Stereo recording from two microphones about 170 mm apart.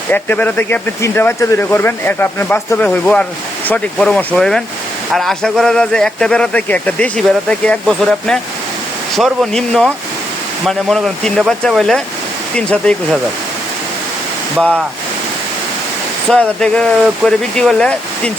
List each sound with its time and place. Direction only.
0.1 s speech: 10° left (ahead or behind)
14.5 s speech: centre (ahead or behind)
16.3 s speech: 5° left (ahead or behind)